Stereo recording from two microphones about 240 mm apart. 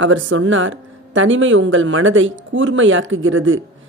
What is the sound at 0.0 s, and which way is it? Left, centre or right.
Speech, right.